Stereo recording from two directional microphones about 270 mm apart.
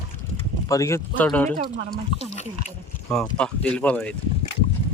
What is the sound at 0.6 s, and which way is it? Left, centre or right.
Speech, centre.